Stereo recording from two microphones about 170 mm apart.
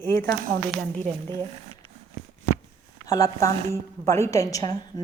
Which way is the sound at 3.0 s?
20° left (ahead or behind).